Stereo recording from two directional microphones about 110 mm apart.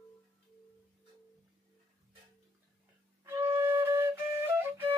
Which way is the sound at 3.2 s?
25° right (ahead or behind).